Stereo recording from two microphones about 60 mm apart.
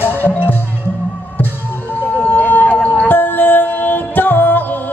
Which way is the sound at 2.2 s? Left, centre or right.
Left.